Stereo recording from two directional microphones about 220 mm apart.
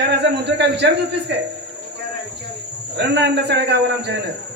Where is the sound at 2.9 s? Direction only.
50° right (ahead or behind).